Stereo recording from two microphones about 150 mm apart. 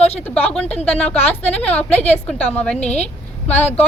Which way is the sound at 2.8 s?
50° left (ahead or behind).